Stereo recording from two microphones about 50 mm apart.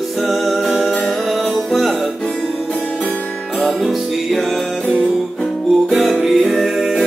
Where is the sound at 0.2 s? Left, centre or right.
Centre.